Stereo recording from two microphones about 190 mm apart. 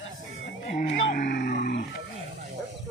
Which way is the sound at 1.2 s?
60° left (ahead or behind).